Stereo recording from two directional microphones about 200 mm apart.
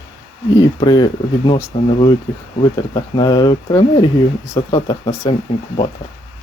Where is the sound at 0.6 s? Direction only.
20° left (ahead or behind).